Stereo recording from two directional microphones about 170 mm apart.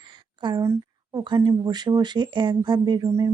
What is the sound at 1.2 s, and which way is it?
Speech, 25° right (ahead or behind).